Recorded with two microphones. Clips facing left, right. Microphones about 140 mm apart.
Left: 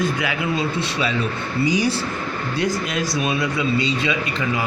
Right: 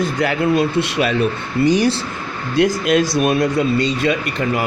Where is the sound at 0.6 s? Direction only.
65° right (ahead or behind).